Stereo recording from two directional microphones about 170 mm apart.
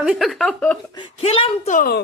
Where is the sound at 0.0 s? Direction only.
5° right (ahead or behind).